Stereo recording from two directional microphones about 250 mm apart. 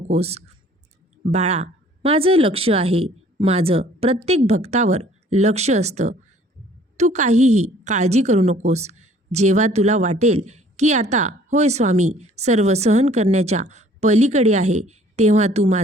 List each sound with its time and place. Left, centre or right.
0.1 s a woman's voice: right